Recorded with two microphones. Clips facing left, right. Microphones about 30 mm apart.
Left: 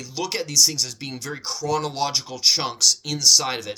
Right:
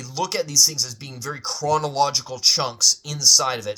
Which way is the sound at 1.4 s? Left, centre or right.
Centre.